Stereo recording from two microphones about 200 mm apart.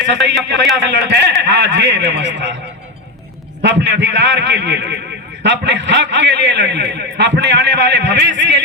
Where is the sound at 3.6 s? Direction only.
60° right (ahead or behind).